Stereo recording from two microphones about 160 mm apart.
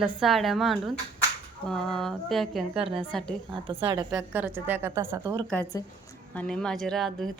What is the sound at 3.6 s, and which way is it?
Speech, 35° right (ahead or behind).